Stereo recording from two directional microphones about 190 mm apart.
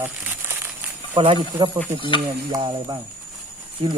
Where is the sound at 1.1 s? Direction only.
30° right (ahead or behind).